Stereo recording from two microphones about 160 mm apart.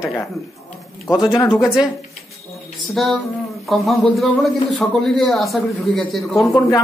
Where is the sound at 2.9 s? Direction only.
Centre (ahead or behind).